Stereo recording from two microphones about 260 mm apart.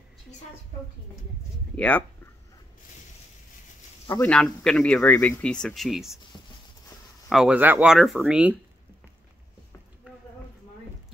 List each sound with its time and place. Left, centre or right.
1.8 s speech: centre
4.3 s speech: centre
6.3 s a sound: centre
7.2 s speech: centre